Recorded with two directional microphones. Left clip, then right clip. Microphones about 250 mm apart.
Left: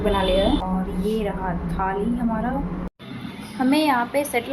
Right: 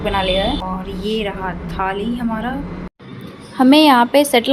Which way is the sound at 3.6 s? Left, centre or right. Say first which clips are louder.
Right 9 dB; right.